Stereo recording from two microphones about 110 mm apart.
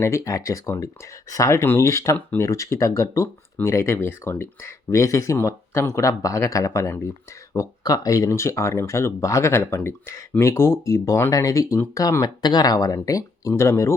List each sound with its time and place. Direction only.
0.0 s speech: 30° left (ahead or behind)